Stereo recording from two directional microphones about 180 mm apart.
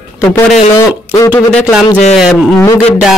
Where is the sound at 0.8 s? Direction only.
20° left (ahead or behind).